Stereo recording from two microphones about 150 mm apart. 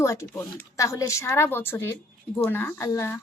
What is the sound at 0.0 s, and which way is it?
A woman's voice, 20° left (ahead or behind).